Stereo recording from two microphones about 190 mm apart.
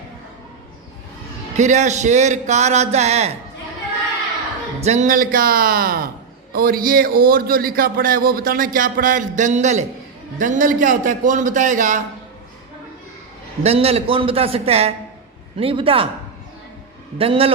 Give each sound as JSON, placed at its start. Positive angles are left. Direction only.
{"t": 1.5, "sound": "a man's voice", "side_deg": -40}
{"t": 4.8, "sound": "a man's voice", "side_deg": -35}
{"t": 13.6, "sound": "a man's voice", "side_deg": -35}
{"t": 17.2, "sound": "a man's voice", "side_deg": -30}